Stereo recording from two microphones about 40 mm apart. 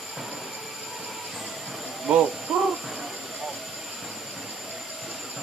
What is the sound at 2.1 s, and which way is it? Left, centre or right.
Speech, right.